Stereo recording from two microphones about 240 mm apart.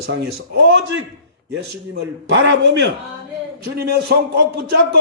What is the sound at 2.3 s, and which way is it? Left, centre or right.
A man's voice, right.